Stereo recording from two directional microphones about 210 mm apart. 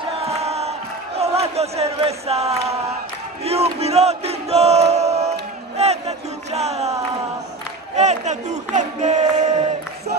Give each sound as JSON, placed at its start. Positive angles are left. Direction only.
{"t": 0.2, "sound": "crowd", "side_deg": -30}
{"t": 3.4, "sound": "battle cry", "side_deg": -30}
{"t": 5.8, "sound": "crowd", "side_deg": -30}
{"t": 7.9, "sound": "a sound", "side_deg": -35}